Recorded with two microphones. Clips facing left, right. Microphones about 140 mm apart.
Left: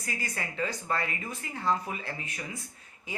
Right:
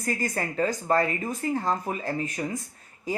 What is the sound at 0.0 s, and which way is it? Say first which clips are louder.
Speech: right 8 dB; 45° right (ahead or behind).